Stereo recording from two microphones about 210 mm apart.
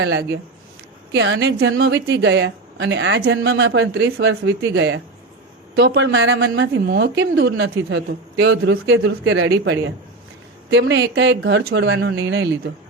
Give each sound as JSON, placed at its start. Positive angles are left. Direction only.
{"t": 0.0, "sound": "a woman's voice", "side_deg": -55}